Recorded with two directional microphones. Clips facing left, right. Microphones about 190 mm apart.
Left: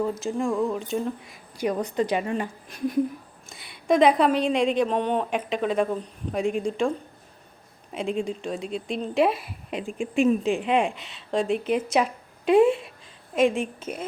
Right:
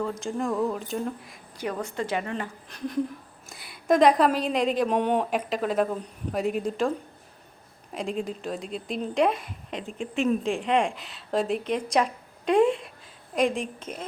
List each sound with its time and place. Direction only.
0.0 s speech: 5° left (ahead or behind)
1.5 s a woman's voice: 15° left (ahead or behind)
3.5 s speech: centre (ahead or behind)
7.9 s speech: centre (ahead or behind)